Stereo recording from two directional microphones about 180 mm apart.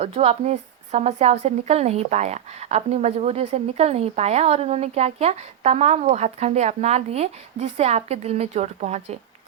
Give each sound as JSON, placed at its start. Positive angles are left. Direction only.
{"t": 0.0, "sound": "a woman's voice", "side_deg": -35}